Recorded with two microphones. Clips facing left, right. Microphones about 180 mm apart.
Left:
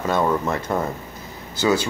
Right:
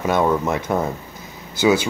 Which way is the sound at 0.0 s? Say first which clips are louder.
Right 2 dB; 15° right (ahead or behind).